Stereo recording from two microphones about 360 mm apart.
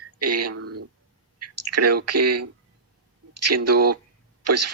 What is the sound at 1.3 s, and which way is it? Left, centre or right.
Speech, right.